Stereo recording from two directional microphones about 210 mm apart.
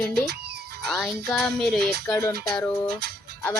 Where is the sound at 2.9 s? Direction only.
50° right (ahead or behind).